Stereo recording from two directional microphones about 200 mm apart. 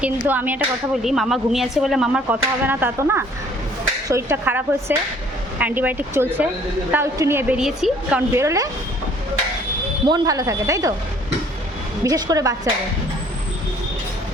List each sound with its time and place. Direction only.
0.3 s a woman's voice: 10° right (ahead or behind)
8.3 s a woman's voice: 15° right (ahead or behind)
10.1 s a woman's voice: 15° right (ahead or behind)
12.0 s a woman's voice: 20° right (ahead or behind)